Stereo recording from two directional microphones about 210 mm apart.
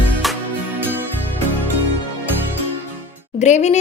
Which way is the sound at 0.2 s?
Centre (ahead or behind).